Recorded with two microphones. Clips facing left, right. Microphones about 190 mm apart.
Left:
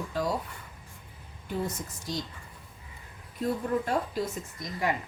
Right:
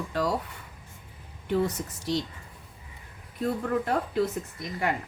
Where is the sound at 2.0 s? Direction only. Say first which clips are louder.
Right 6 dB; 70° right (ahead or behind).